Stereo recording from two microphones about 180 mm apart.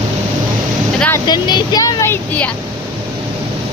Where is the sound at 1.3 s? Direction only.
25° left (ahead or behind).